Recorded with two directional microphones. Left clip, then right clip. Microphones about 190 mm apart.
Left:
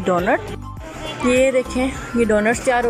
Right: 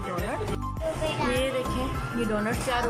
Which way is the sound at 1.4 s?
25° left (ahead or behind).